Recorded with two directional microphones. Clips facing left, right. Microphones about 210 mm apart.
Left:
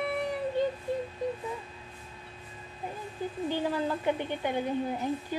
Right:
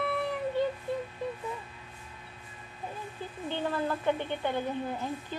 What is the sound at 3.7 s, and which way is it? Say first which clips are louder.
A woman's voice: right 3 dB; 15° left (ahead or behind).